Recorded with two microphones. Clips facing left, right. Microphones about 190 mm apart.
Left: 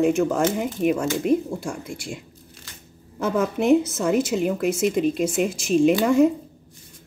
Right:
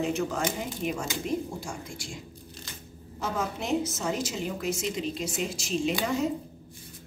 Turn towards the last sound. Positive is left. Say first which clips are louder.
# left 11 dB
turn(degrees=55)  # may be behind; listen again after turning